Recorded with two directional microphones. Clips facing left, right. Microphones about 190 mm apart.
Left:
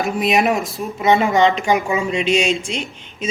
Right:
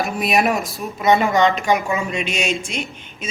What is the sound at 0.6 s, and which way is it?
Speech, centre (ahead or behind).